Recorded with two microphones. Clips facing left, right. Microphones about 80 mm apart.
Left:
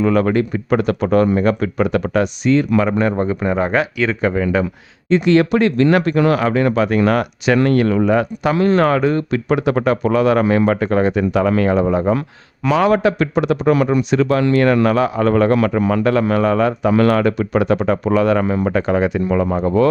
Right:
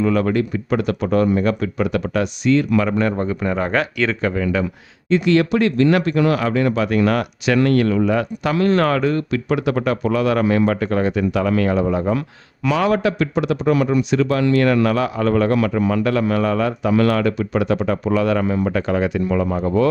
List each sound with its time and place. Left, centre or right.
0.0 s speech: left; by 4.2 s centre
4.2 s speech: left
9.3 s speech: left